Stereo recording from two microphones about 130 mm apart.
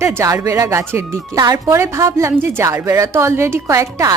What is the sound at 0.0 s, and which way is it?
Speech, 20° right (ahead or behind).